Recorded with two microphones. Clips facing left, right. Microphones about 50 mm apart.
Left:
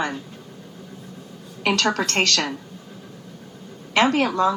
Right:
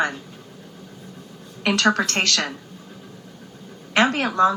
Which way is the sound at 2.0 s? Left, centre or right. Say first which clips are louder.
Left 1 dB; left.